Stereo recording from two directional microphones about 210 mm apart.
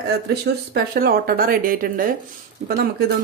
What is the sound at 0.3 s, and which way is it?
Speech, 45° right (ahead or behind).